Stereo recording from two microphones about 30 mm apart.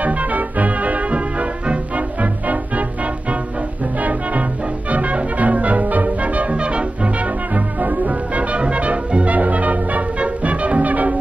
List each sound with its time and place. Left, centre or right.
0.0 s music: right
4.0 s music: right
7.5 s music: right
9.3 s music: right